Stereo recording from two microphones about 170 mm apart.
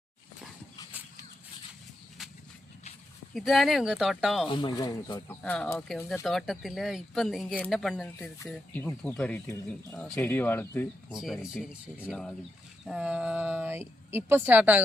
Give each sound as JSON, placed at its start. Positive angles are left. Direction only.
{"t": 0.9, "sound": "a sound", "side_deg": -10}
{"t": 3.3, "sound": "speech", "side_deg": 0}
{"t": 4.4, "sound": "speech", "side_deg": 30}
{"t": 5.3, "sound": "speech", "side_deg": 5}
{"t": 11.1, "sound": "a woman's voice", "side_deg": -5}